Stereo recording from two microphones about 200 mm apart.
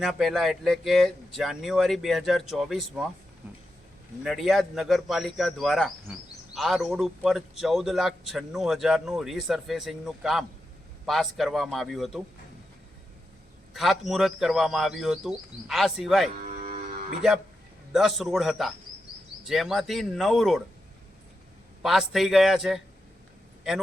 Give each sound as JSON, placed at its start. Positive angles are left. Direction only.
{"t": 0.0, "sound": "a man's voice", "side_deg": 0}
{"t": 4.2, "sound": "a man's voice", "side_deg": 0}
{"t": 13.7, "sound": "a man's voice", "side_deg": 0}
{"t": 16.5, "sound": "livestock", "side_deg": -35}
{"t": 17.9, "sound": "a man's voice", "side_deg": 0}
{"t": 21.8, "sound": "a man's voice", "side_deg": 0}